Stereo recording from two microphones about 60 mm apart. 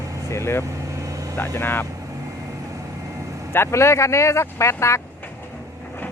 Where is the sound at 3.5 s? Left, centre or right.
Left.